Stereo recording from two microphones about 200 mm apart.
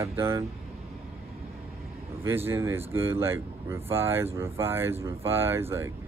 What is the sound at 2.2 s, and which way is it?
Speech, 10° right (ahead or behind).